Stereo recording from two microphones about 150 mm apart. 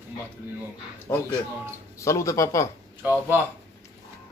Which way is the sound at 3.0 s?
10° right (ahead or behind).